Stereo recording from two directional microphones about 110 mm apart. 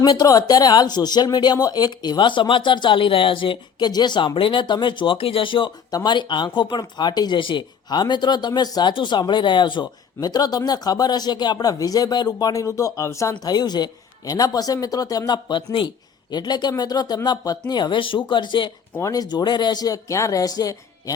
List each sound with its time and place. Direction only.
0.0 s speech: 40° left (ahead or behind)